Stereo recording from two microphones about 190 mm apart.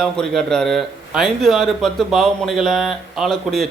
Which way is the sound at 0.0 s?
5° left (ahead or behind).